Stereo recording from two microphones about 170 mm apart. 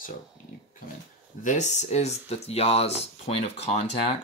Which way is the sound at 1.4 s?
45° left (ahead or behind).